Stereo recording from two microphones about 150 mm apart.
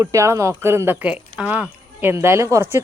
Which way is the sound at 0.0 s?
20° right (ahead or behind).